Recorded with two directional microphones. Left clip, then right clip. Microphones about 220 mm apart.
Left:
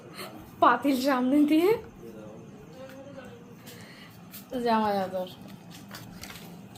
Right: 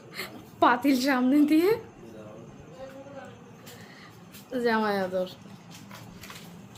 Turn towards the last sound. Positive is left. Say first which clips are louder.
# right 1 dB
turn(degrees=-20)  # may be behind; listen again after turning